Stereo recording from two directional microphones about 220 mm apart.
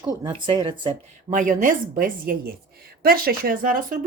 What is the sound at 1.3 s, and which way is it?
Speech, 35° right (ahead or behind).